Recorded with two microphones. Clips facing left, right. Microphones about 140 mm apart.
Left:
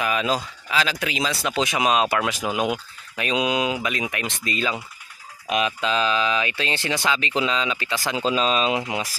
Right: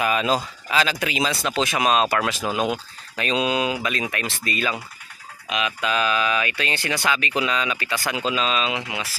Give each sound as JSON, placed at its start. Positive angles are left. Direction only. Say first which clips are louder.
{"t": 0.1, "sound": "speech", "louder": "right 2 dB", "side_deg": 0}
{"t": 1.4, "sound": "speech", "louder": "left 2 dB", "side_deg": 15}
{"t": 5.5, "sound": "speech", "louder": "left 2 dB", "side_deg": 35}
{"t": 8.1, "sound": "speech", "louder": "left 2 dB", "side_deg": 35}